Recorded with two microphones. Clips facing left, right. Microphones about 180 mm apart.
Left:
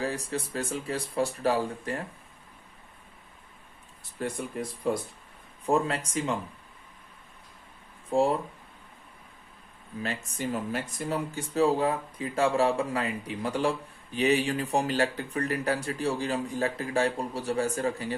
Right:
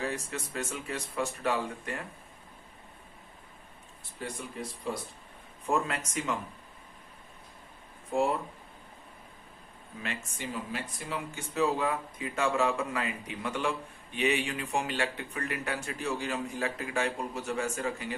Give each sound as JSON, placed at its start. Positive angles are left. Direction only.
{"t": 0.0, "sound": "speech", "side_deg": 35}
{"t": 4.2, "sound": "speech", "side_deg": 45}
{"t": 5.6, "sound": "speech", "side_deg": 30}
{"t": 8.1, "sound": "speech", "side_deg": 30}
{"t": 10.2, "sound": "speech", "side_deg": 40}